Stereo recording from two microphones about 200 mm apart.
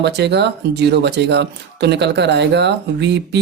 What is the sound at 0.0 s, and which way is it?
Speech, 55° right (ahead or behind).